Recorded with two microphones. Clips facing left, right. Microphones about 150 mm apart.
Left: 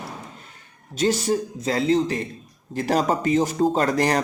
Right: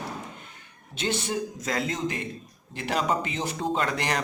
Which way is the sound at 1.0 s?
40° left (ahead or behind).